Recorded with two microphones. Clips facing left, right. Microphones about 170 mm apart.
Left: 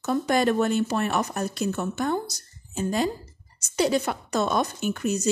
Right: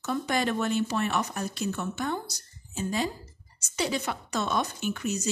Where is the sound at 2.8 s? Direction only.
50° left (ahead or behind).